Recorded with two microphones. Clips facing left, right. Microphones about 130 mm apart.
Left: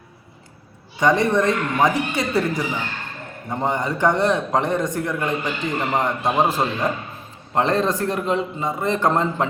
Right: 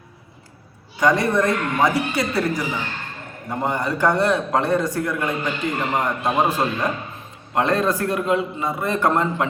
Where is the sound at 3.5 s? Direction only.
20° left (ahead or behind).